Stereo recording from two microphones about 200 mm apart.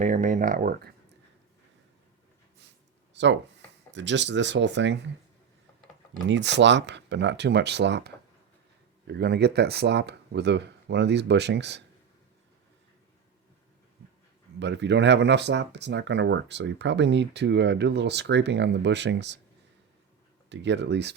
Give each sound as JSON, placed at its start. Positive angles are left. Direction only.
{"t": 0.0, "sound": "speech", "side_deg": -35}
{"t": 3.2, "sound": "speech", "side_deg": -60}
{"t": 6.2, "sound": "speech", "side_deg": -60}
{"t": 14.6, "sound": "speech", "side_deg": -60}
{"t": 20.5, "sound": "speech", "side_deg": -60}